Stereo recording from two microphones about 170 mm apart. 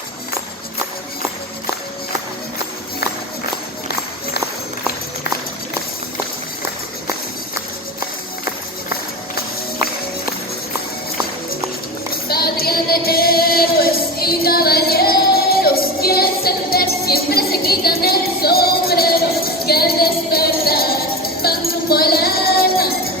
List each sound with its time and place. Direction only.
12.1 s music: 65° left (ahead or behind)